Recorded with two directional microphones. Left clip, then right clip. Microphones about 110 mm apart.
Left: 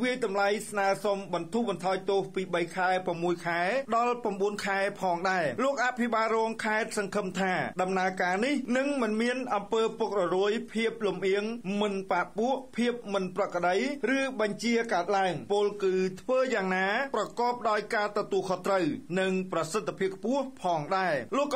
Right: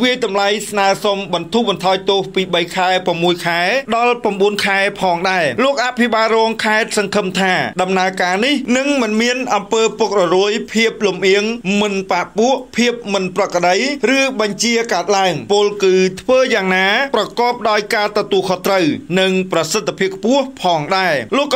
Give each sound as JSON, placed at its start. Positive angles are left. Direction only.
{"t": 0.0, "sound": "speech", "side_deg": -20}
{"t": 8.6, "sound": "speech", "side_deg": -15}
{"t": 20.9, "sound": "speech", "side_deg": -40}